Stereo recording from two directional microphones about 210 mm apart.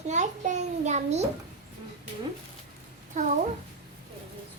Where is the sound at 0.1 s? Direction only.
35° right (ahead or behind).